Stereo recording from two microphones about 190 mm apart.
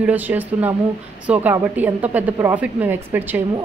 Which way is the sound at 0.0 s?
10° right (ahead or behind).